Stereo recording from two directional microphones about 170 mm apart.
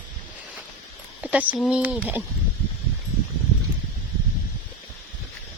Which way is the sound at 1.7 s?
5° right (ahead or behind).